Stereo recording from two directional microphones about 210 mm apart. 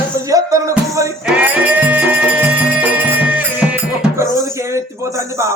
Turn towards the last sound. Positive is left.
turn(degrees=-15)  # may be behind; listen again after turning